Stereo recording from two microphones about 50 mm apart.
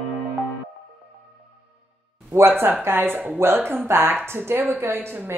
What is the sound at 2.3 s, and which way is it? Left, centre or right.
Speech, right.